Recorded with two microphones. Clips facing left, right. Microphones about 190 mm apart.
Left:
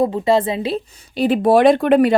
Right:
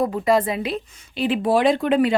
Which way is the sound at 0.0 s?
25° left (ahead or behind).